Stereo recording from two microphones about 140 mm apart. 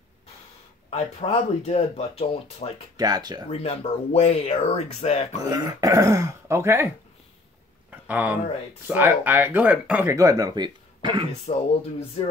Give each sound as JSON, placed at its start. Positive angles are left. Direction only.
{"t": 0.8, "sound": "speech", "side_deg": 50}
{"t": 3.0, "sound": "speech", "side_deg": -30}
{"t": 3.4, "sound": "speech", "side_deg": 50}
{"t": 5.4, "sound": "speech", "side_deg": -25}
{"t": 7.9, "sound": "a sound", "side_deg": -10}
{"t": 8.8, "sound": "speech", "side_deg": -15}
{"t": 10.1, "sound": "speech", "side_deg": -25}
{"t": 11.5, "sound": "speech", "side_deg": 50}